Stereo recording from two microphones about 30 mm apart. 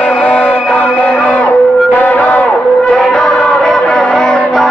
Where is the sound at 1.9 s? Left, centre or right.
Left.